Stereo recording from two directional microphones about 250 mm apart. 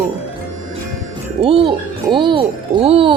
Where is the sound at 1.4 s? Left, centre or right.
Right.